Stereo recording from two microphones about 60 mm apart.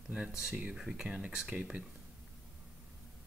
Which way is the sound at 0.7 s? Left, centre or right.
Centre.